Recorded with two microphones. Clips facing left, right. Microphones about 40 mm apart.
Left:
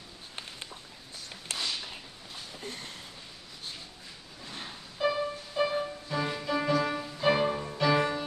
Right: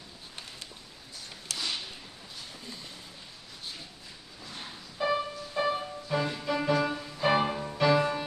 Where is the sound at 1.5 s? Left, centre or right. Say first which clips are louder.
Left 1 dB; left.